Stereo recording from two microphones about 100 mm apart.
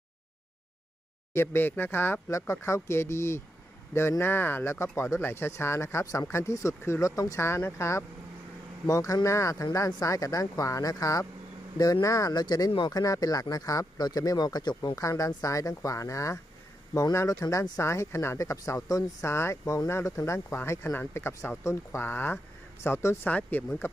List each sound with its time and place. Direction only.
1.3 s speech: 25° left (ahead or behind)
19.6 s speech: 40° left (ahead or behind)
19.9 s speech: 25° left (ahead or behind)